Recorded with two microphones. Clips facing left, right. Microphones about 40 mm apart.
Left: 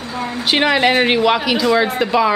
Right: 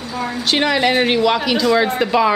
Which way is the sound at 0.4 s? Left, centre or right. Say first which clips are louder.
Left 2 dB; centre.